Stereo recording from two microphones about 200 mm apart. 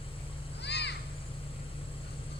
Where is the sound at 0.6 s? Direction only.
60° left (ahead or behind).